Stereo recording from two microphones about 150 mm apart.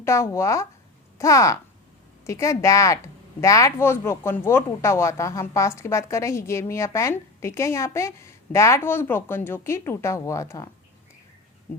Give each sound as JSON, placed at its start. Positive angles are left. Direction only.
{"t": 0.0, "sound": "a woman's voice", "side_deg": 20}